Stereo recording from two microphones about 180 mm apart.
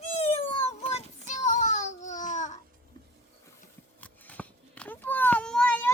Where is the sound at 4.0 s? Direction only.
10° left (ahead or behind).